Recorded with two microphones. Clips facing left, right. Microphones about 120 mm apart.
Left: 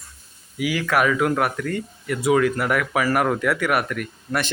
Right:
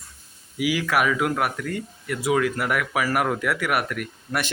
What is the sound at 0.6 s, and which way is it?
Speech, 10° right (ahead or behind).